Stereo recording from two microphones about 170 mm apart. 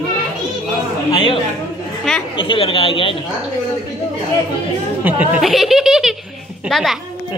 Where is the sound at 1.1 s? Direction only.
30° left (ahead or behind).